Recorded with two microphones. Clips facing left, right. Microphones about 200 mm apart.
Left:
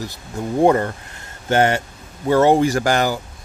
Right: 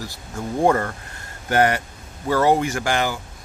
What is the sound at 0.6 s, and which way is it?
Speech, 20° left (ahead or behind).